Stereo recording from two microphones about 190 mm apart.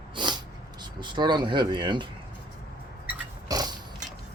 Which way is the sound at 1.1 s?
25° right (ahead or behind).